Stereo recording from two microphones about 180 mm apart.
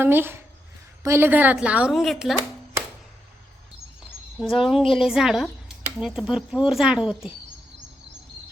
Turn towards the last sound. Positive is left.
turn(degrees=-5)  # may be behind; listen again after turning